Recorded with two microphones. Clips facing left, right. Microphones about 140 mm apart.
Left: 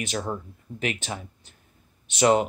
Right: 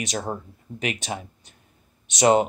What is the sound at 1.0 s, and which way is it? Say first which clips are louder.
Speech: right 3 dB; 15° right (ahead or behind).